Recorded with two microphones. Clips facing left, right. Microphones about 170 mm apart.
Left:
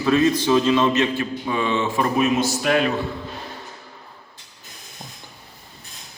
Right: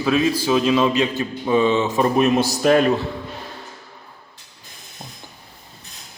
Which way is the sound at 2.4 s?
40° right (ahead or behind).